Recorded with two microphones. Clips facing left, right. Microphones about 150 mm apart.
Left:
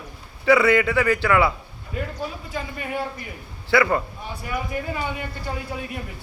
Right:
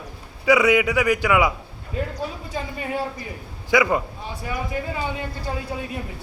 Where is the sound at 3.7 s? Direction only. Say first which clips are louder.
Even; 15° right (ahead or behind).